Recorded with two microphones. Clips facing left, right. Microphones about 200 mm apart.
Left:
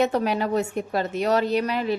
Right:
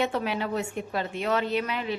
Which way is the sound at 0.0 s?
40° left (ahead or behind).